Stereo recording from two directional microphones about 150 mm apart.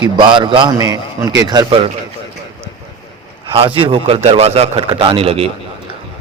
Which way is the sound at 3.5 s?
35° right (ahead or behind).